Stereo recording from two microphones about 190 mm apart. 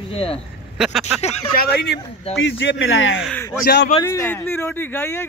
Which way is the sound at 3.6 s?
60° left (ahead or behind).